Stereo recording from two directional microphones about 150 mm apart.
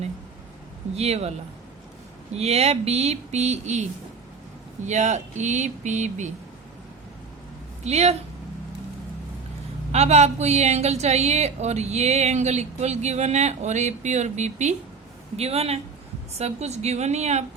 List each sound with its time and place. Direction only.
0.9 s speech: 45° right (ahead or behind)
2.3 s speech: 45° right (ahead or behind)
4.9 s speech: 50° right (ahead or behind)
7.9 s speech: 45° right (ahead or behind)
9.9 s speech: 45° right (ahead or behind)